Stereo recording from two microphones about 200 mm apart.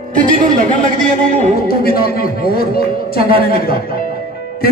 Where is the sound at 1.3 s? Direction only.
40° right (ahead or behind).